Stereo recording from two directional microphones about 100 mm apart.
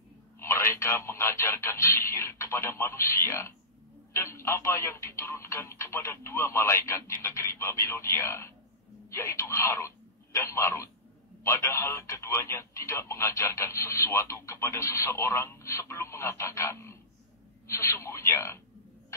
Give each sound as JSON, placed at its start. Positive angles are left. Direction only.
{"t": 0.4, "sound": "speech", "side_deg": 25}